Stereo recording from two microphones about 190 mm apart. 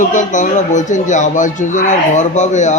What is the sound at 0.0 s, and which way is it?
Speech, 40° left (ahead or behind).